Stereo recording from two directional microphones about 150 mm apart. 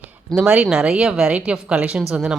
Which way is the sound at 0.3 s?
5° right (ahead or behind).